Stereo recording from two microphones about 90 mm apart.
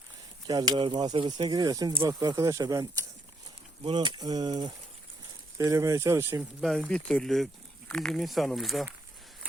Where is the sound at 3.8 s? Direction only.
60° right (ahead or behind).